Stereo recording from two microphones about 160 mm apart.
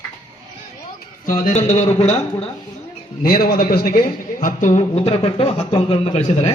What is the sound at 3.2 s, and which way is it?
A man's voice, 65° left (ahead or behind).